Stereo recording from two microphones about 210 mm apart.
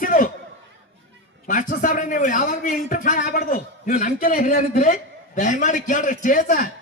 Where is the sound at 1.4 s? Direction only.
40° left (ahead or behind).